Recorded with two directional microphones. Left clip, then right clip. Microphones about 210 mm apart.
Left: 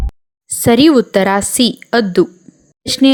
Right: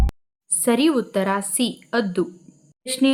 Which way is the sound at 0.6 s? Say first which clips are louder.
Left 10 dB; 35° left (ahead or behind).